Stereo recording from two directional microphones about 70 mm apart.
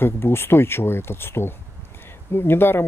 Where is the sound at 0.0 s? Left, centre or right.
Left.